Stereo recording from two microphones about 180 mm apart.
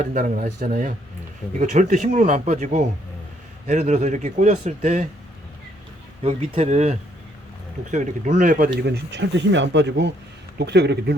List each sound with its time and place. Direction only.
0.0 s speech: 45° right (ahead or behind)
6.2 s speech: 30° right (ahead or behind); by 11.2 s 65° right (ahead or behind)